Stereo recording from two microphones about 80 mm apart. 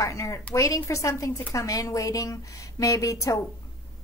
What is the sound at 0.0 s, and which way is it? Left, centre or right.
A woman's voice, left.